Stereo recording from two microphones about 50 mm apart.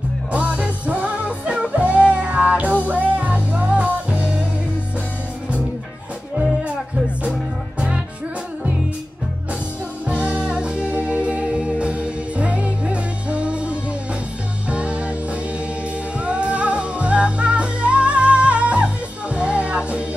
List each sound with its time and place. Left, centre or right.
0.3 s music: right
10.0 s music: right
16.3 s music: right